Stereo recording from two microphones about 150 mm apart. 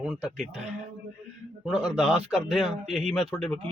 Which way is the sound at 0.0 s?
5° right (ahead or behind).